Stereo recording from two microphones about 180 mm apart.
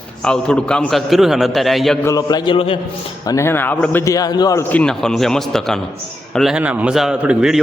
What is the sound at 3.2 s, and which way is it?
A man's voice, 15° left (ahead or behind).